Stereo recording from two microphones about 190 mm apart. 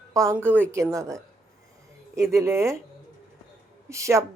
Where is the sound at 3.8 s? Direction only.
15° right (ahead or behind).